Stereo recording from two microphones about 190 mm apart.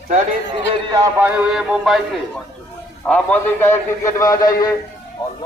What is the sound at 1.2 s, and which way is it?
Speech, 10° right (ahead or behind).